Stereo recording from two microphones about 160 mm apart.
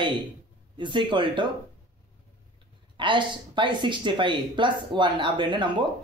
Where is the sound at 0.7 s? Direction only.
30° right (ahead or behind).